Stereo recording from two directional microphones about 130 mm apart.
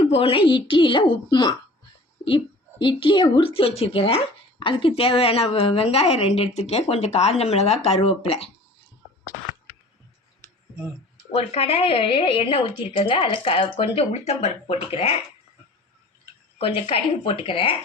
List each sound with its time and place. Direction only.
0.0 s a woman's voice: 45° left (ahead or behind)
11.3 s a woman's voice: 50° left (ahead or behind)
16.6 s a woman's voice: 45° left (ahead or behind)